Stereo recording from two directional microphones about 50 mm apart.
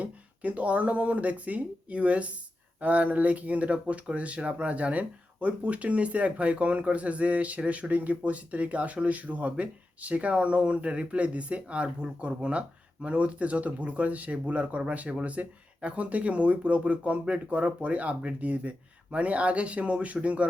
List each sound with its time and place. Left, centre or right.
0.0 s speech: right